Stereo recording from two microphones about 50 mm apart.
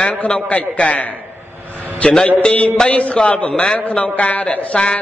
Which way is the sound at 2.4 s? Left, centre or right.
Left.